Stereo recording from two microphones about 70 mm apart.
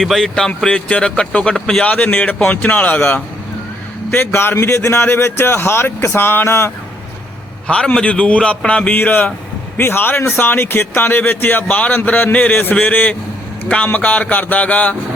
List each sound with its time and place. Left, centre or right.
0.0 s speech: centre
1.8 s a man's voice: centre
4.1 s a man's voice: left
7.7 s a man's voice: centre
9.7 s a man's voice: left